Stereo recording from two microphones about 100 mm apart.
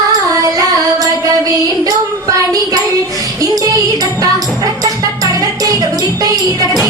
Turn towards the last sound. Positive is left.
turn(degrees=-35)  # may be behind; listen again after turning